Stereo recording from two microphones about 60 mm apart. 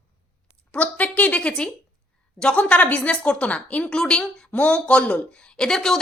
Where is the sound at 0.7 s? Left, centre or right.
Left.